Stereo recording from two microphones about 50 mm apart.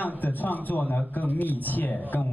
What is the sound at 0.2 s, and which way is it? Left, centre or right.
Speech, left.